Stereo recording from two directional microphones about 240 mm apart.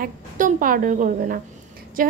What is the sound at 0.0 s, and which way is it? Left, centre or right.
A woman's voice, right.